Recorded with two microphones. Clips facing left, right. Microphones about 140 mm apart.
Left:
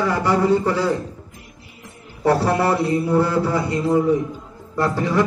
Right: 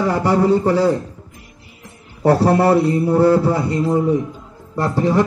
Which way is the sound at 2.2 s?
40° right (ahead or behind).